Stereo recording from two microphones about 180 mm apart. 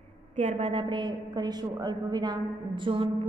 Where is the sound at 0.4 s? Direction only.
35° right (ahead or behind).